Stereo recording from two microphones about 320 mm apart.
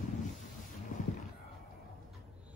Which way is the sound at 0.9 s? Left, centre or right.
Left.